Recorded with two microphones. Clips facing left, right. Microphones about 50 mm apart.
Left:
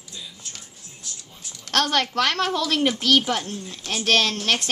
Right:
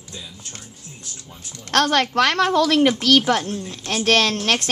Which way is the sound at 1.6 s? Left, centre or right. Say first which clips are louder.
Right 4 dB; right.